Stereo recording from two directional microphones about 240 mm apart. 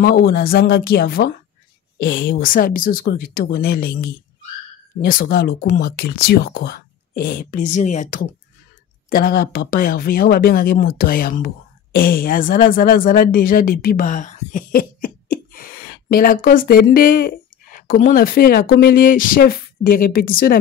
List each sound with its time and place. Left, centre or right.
0.0 s speech: left